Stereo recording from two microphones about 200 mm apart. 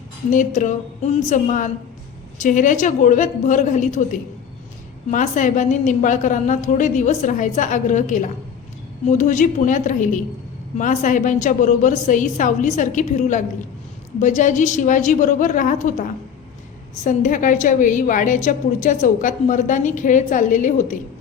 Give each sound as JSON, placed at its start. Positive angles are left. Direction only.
{"t": 0.3, "sound": "a woman's voice", "side_deg": 40}